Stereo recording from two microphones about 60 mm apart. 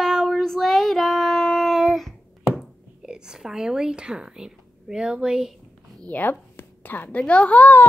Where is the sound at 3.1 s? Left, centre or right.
Centre.